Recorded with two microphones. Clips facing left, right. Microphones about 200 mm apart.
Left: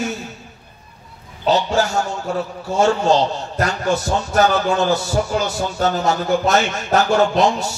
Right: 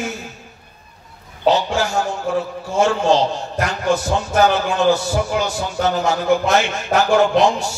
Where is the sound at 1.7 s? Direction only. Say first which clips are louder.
Left 2 dB; 40° left (ahead or behind).